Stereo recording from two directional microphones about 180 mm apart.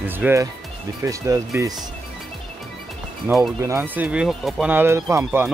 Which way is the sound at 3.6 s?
15° right (ahead or behind).